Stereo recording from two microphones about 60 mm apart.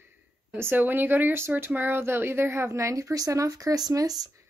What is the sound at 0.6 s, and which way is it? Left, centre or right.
A woman's voice, right.